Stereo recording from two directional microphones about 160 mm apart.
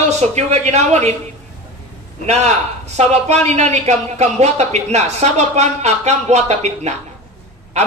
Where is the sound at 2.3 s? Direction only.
45° right (ahead or behind).